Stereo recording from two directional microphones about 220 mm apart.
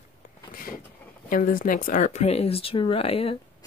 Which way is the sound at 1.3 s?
40° left (ahead or behind).